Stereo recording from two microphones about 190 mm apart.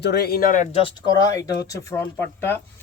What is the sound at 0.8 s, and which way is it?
Speech, 20° left (ahead or behind).